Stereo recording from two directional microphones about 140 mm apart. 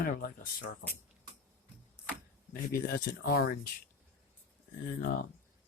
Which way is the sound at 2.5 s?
90° left.